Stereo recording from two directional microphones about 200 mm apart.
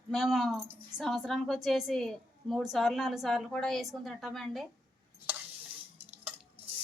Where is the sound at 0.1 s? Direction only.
Centre (ahead or behind).